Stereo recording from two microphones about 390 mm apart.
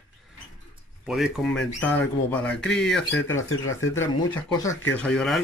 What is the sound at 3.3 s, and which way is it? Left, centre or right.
Speech, left.